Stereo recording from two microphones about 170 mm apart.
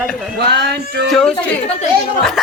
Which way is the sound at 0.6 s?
90° right.